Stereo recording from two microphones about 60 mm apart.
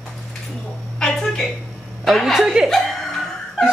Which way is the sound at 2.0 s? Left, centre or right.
Centre.